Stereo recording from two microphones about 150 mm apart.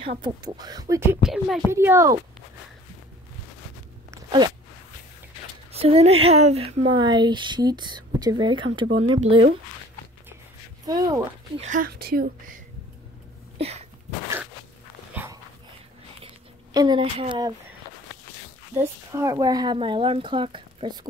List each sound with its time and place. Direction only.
0.0 s speech: 40° right (ahead or behind)
0.4 s speech: 25° right (ahead or behind)
1.2 s music: centre (ahead or behind)
1.7 s speech: 15° right (ahead or behind)
5.7 s speech: 45° right (ahead or behind)
6.9 s a woman's voice: 30° right (ahead or behind)
10.9 s speech: 25° right (ahead or behind)
11.6 s speech: 65° right (ahead or behind); by 12.5 s 85° right
13.6 s sneeze: 45° right (ahead or behind)
16.7 s a woman's voice: 30° right (ahead or behind)
19.1 s a woman's voice: 25° right (ahead or behind)